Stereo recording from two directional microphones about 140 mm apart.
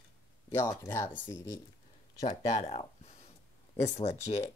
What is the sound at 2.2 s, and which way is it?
Speech, 35° left (ahead or behind).